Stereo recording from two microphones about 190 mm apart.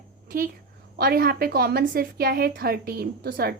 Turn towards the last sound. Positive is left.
turn(degrees=-50)  # may be behind; listen again after turning